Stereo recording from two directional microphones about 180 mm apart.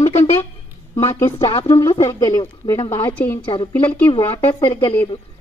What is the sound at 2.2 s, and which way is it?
A woman's voice, 20° left (ahead or behind).